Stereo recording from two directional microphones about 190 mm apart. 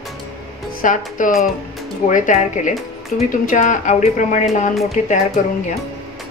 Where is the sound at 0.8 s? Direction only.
45° left (ahead or behind).